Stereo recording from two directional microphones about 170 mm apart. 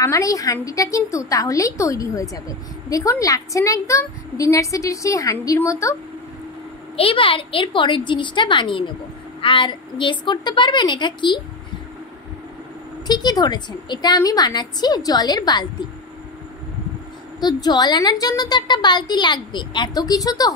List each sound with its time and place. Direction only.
0.0 s a woman's voice: 20° left (ahead or behind)
7.0 s a woman's voice: 30° left (ahead or behind)
13.0 s a woman's voice: 25° left (ahead or behind)
17.4 s a woman's voice: 25° left (ahead or behind)